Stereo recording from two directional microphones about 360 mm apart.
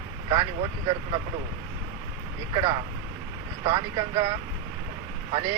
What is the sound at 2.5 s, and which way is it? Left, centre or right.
Speech, centre.